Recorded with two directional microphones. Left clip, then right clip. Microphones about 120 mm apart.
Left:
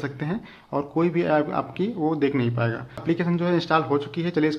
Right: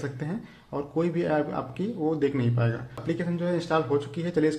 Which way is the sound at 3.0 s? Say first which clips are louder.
Left 5 dB; 30° left (ahead or behind).